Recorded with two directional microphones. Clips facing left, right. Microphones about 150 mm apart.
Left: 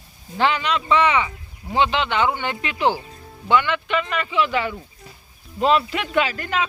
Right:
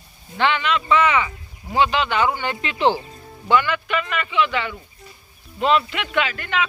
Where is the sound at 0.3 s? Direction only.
35° left (ahead or behind).